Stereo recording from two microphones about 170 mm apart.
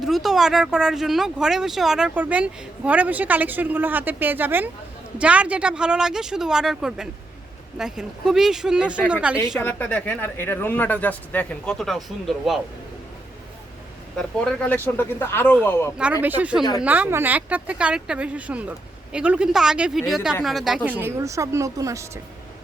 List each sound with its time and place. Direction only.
0.0 s speech: centre (ahead or behind)
9.6 s speech: 10° left (ahead or behind)
14.2 s speech: 5° left (ahead or behind)
16.0 s speech: 10° right (ahead or behind)